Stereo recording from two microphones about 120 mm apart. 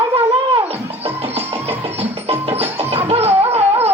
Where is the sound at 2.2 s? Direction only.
55° right (ahead or behind).